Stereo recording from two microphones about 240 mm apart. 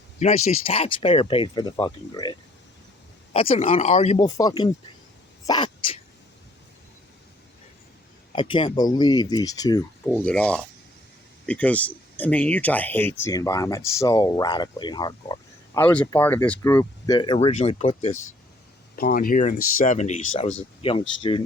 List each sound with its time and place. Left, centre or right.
0.2 s speech: left
3.3 s speech: left
8.3 s speech: left
18.9 s speech: left